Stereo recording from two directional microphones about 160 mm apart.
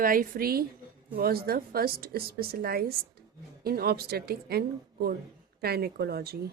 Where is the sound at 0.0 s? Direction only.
60° right (ahead or behind); by 6.3 s 80° right.